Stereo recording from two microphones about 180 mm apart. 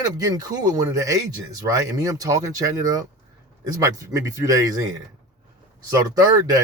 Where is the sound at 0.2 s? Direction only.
20° right (ahead or behind).